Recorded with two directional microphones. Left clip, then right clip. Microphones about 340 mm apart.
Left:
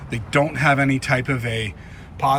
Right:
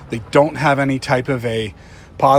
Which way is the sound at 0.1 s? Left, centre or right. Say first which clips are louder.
Right 6 dB; centre.